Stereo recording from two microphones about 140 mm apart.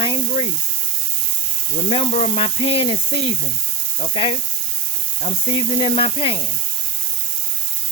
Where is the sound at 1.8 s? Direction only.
50° left (ahead or behind).